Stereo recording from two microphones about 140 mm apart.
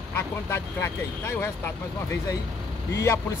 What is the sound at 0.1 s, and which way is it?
Speech, 15° left (ahead or behind).